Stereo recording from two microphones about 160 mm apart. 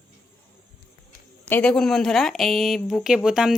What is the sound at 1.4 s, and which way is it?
Speech, 10° left (ahead or behind).